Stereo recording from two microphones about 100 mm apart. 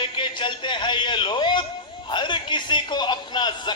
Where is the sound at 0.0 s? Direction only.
55° left (ahead or behind).